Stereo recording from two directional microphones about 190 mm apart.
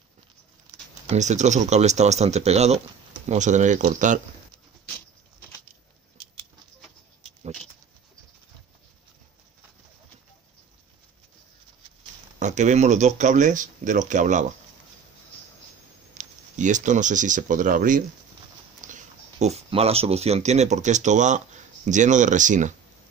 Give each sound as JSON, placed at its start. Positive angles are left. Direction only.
{"t": 1.0, "sound": "speech", "side_deg": -40}
{"t": 12.4, "sound": "speech", "side_deg": -40}
{"t": 16.2, "sound": "speech", "side_deg": -40}
{"t": 18.8, "sound": "a sound", "side_deg": -40}
{"t": 19.4, "sound": "speech", "side_deg": -35}